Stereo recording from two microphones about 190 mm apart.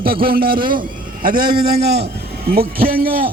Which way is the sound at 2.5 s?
50° right (ahead or behind).